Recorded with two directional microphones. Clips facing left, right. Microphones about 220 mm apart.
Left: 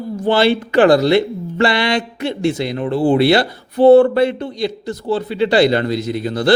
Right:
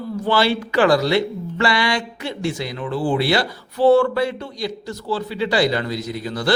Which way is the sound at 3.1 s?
60° left (ahead or behind).